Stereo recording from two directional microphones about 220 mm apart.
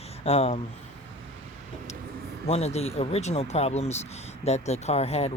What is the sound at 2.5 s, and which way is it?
Speech, 30° left (ahead or behind).